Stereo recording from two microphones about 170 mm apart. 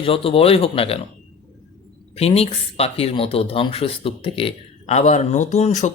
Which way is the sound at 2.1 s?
35° left (ahead or behind).